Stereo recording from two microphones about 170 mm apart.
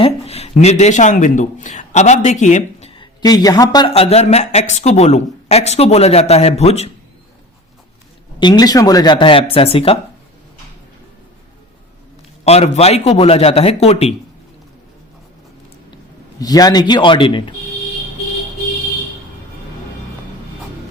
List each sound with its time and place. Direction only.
0.0 s speech: 35° left (ahead or behind)
2.9 s speech: 25° left (ahead or behind)
3.9 s speech: 35° left (ahead or behind)
8.4 s speech: 25° left (ahead or behind)
12.5 s speech: 40° left (ahead or behind)
16.4 s speech: 20° left (ahead or behind)